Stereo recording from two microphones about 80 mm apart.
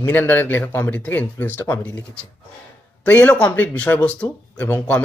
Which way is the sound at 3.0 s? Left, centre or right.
Centre.